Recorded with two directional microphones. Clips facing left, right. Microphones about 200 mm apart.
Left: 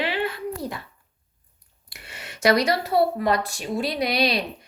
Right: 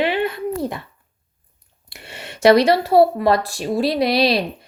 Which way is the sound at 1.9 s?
30° right (ahead or behind).